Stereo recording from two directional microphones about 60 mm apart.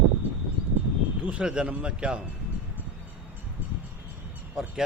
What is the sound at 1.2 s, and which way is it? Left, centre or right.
Speech, centre.